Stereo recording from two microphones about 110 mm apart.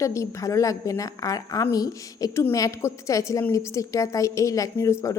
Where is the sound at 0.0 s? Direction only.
30° left (ahead or behind).